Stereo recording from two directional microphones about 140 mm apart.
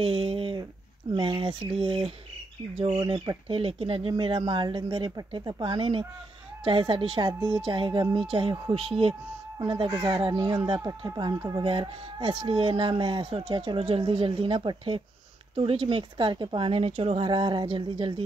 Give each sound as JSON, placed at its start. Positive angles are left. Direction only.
{"t": 0.0, "sound": "a sound", "side_deg": -40}
{"t": 1.1, "sound": "speech", "side_deg": -35}
{"t": 9.6, "sound": "speech", "side_deg": -25}